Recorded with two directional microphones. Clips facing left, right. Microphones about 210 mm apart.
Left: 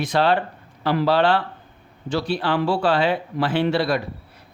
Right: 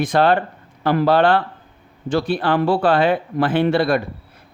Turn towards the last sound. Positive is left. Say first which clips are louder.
# right 4 dB
turn(degrees=-50)  # may be behind; listen again after turning